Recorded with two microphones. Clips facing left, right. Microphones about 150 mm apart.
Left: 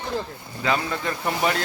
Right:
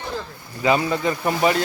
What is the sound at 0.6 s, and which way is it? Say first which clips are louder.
Speech: right 5 dB; 10° right (ahead or behind).